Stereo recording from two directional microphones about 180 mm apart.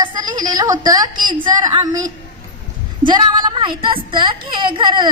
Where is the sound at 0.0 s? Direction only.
20° right (ahead or behind).